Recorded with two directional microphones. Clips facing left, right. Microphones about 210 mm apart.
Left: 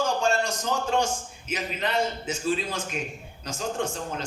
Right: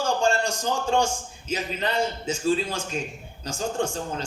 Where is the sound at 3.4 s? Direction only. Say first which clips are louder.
Right 2 dB; 30° right (ahead or behind).